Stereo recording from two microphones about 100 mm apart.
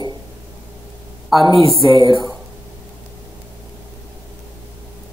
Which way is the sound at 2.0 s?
50° right (ahead or behind).